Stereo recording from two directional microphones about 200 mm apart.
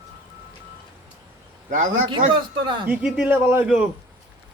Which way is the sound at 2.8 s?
5° right (ahead or behind).